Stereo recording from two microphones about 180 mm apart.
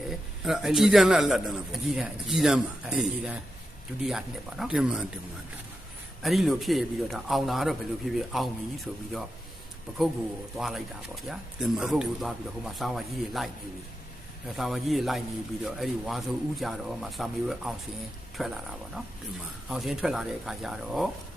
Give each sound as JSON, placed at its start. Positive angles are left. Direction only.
{"t": 0.0, "sound": "a man's voice", "side_deg": 0}
{"t": 6.2, "sound": "a man's voice", "side_deg": 0}
{"t": 10.6, "sound": "a man's voice", "side_deg": 0}